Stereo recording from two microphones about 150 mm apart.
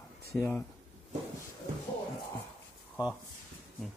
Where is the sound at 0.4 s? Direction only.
15° left (ahead or behind).